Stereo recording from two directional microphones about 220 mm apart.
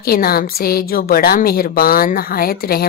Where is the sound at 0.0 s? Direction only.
45° left (ahead or behind).